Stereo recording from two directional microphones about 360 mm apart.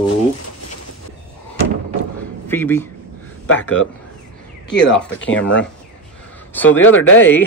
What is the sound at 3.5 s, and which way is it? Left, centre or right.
Speech, left.